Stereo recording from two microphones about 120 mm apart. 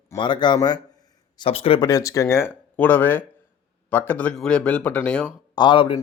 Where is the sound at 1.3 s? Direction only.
50° left (ahead or behind).